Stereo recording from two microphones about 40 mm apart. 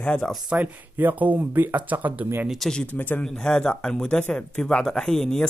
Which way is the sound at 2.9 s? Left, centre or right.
Left.